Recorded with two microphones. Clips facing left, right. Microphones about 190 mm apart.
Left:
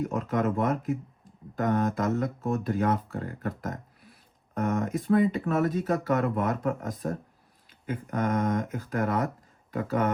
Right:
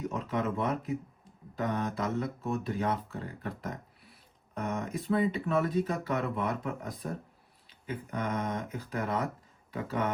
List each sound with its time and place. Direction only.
0.1 s speech: 50° left (ahead or behind)